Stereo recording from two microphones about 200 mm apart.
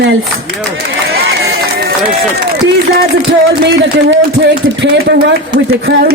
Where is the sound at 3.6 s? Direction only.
55° right (ahead or behind).